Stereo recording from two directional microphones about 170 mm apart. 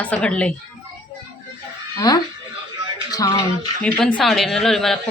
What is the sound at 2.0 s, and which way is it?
Speech, 25° left (ahead or behind).